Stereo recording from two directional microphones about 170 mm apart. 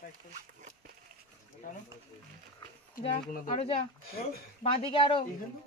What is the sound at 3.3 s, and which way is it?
Speech, 50° left (ahead or behind).